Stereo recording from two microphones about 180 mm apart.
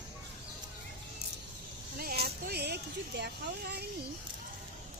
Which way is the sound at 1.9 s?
60° right (ahead or behind).